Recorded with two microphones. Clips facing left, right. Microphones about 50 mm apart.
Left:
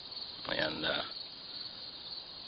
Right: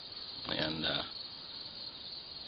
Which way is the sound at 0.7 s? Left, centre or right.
Centre.